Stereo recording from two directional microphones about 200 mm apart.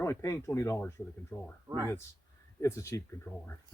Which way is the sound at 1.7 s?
15° right (ahead or behind).